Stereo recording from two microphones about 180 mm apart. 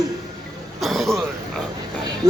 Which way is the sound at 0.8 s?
Centre (ahead or behind).